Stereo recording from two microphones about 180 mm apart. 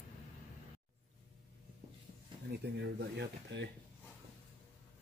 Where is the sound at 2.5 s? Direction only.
65° right (ahead or behind).